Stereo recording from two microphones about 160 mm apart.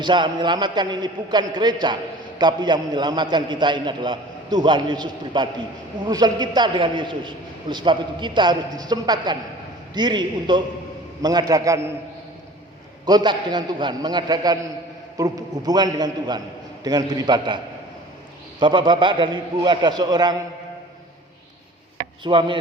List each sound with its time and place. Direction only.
0.0 s a man's voice: 30° right (ahead or behind)
13.1 s a man's voice: 25° right (ahead or behind)
18.6 s a man's voice: 30° right (ahead or behind)
22.2 s speech: 30° right (ahead or behind)